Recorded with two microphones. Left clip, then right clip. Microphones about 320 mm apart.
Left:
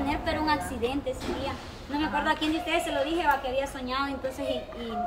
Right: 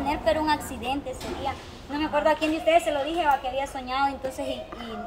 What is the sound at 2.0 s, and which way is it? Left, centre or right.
Speech, centre.